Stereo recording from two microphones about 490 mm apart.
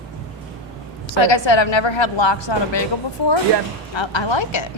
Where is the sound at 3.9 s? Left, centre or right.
Left.